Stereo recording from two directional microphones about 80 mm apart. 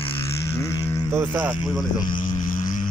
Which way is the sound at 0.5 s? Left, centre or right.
Left.